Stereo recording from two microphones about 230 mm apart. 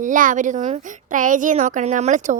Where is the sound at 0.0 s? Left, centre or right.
Right.